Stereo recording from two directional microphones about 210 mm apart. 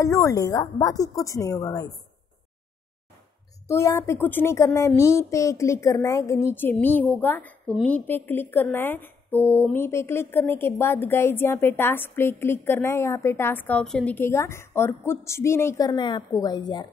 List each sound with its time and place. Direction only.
0.0 s speech: 15° left (ahead or behind)
3.6 s speech: 15° left (ahead or behind)